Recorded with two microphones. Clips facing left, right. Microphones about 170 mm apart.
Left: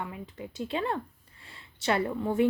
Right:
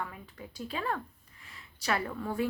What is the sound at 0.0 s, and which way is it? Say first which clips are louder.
Speech: left 3 dB; 20° left (ahead or behind).